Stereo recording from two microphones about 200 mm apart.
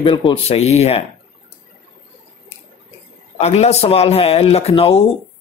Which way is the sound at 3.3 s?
30° left (ahead or behind).